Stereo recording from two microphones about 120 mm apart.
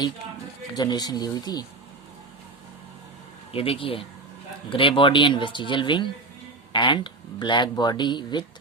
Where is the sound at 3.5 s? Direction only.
50° left (ahead or behind).